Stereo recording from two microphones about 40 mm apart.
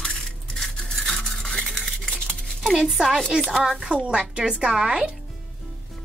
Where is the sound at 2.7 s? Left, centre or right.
Centre.